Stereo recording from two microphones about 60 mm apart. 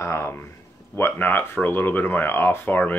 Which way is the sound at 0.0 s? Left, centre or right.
Left.